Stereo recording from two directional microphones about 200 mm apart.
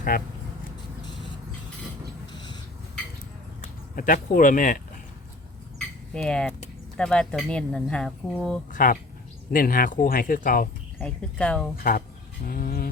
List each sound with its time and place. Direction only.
2.3 s a sound: 20° left (ahead or behind)
3.9 s speech: 40° left (ahead or behind)
6.1 s speech: 5° left (ahead or behind)
8.7 s speech: 45° left (ahead or behind)
10.9 s speech: 5° left (ahead or behind)
11.8 s speech: 45° left (ahead or behind)
12.5 s livestock: 45° left (ahead or behind)